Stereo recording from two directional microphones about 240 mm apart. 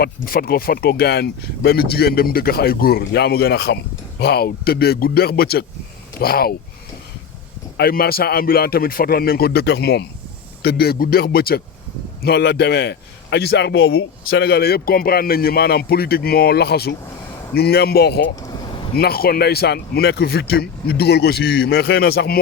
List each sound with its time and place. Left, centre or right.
0.0 s a man's voice: left
7.8 s a man's voice: left
18.3 s vehicle: centre
18.9 s a man's voice: left